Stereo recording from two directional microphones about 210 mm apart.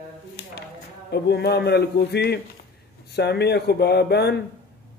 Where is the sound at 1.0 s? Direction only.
50° left (ahead or behind).